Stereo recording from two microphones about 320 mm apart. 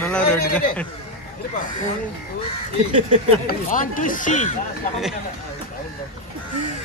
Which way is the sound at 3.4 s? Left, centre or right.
Left.